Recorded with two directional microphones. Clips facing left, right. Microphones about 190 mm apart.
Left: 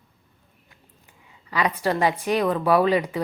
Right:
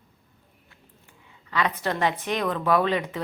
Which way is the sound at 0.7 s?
15° left (ahead or behind).